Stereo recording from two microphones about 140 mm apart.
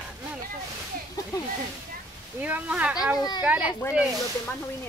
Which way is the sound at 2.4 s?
10° right (ahead or behind).